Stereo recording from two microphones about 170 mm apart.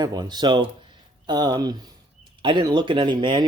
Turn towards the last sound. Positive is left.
turn(degrees=-25)  # may be behind; listen again after turning